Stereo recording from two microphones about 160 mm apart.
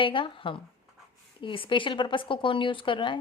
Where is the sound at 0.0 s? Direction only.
30° left (ahead or behind).